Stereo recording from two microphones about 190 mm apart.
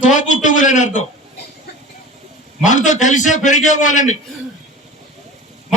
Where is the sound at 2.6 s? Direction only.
40° left (ahead or behind).